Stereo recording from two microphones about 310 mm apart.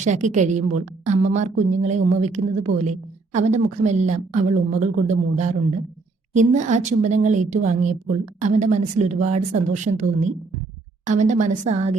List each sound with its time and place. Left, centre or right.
0.0 s a woman's voice: right